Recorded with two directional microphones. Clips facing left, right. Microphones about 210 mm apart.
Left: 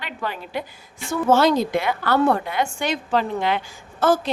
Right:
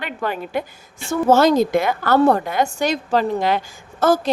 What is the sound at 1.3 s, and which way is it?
A woman's voice, 45° right (ahead or behind).